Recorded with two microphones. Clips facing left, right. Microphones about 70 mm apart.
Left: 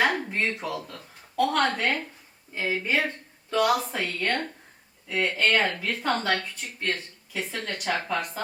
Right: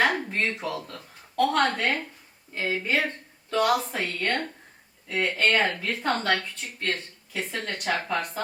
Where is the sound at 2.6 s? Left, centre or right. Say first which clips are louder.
Even; centre.